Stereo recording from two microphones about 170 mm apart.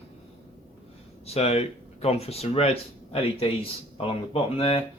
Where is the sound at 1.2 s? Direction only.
35° left (ahead or behind).